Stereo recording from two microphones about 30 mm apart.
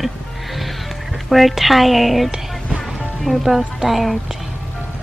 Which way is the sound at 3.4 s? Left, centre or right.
Centre.